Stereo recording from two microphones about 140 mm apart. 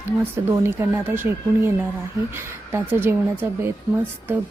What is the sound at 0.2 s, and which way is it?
A woman's voice, 20° right (ahead or behind).